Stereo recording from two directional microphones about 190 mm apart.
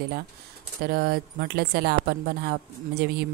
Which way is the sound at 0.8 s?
50° right (ahead or behind).